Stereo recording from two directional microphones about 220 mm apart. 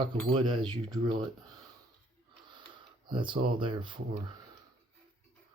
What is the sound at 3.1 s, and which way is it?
Speech, 20° right (ahead or behind).